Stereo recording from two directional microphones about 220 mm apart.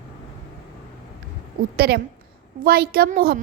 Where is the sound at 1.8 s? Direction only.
45° right (ahead or behind).